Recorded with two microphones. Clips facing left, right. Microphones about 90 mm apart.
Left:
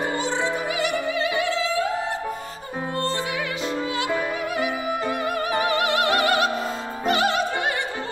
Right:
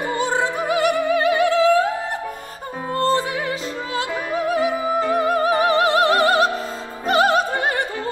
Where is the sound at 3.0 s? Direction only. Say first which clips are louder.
Right 7 dB; 30° right (ahead or behind).